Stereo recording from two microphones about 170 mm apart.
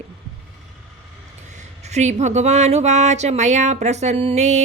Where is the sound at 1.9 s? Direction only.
45° right (ahead or behind).